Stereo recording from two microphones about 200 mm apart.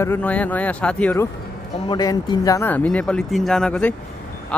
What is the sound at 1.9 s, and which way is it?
Speech, 20° left (ahead or behind).